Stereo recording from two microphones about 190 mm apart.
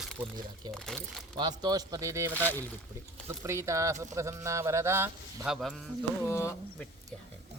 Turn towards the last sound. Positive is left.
turn(degrees=15)  # may be behind; listen again after turning